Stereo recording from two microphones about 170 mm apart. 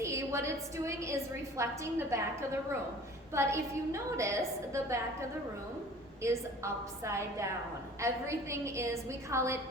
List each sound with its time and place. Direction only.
0.0 s a woman's voice: 15° right (ahead or behind)
6.2 s a woman's voice: 15° right (ahead or behind)